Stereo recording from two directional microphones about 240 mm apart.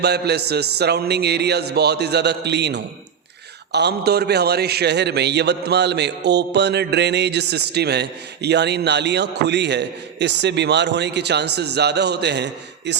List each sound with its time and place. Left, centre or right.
0.0 s a man's voice: right